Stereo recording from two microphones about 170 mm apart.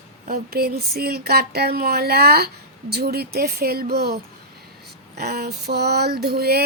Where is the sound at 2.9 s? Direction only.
65° right (ahead or behind).